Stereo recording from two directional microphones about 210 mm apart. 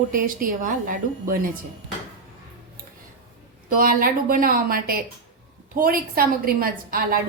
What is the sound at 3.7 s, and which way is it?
A woman's voice, 40° right (ahead or behind).